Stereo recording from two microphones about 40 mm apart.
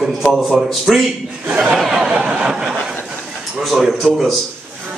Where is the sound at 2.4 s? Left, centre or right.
Centre.